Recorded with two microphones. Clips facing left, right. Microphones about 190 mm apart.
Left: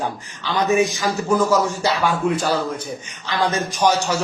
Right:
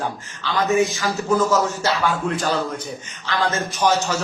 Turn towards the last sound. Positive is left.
turn(degrees=15)  # may be behind; listen again after turning